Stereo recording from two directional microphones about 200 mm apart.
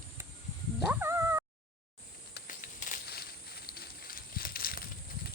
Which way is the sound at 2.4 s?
45° left (ahead or behind).